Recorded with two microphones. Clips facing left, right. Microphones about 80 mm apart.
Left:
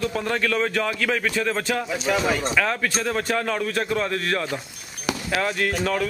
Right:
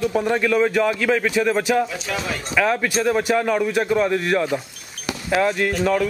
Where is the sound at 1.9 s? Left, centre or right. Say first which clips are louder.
Left 4 dB; centre.